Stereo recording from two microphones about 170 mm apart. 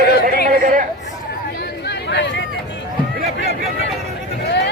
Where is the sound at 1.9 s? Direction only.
90° left.